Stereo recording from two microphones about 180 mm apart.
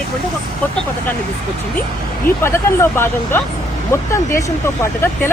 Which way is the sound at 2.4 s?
15° left (ahead or behind).